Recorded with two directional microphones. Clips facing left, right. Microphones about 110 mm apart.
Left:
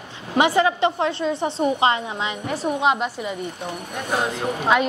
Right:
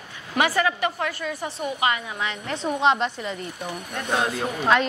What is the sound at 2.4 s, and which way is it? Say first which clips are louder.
A woman's voice: left 1 dB; 5° left (ahead or behind).